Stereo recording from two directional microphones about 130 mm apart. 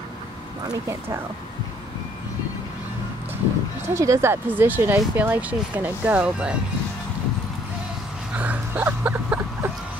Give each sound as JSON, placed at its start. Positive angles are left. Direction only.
{"t": 0.8, "sound": "speech", "side_deg": -20}
{"t": 3.9, "sound": "speech", "side_deg": -25}
{"t": 8.4, "sound": "a sound", "side_deg": -15}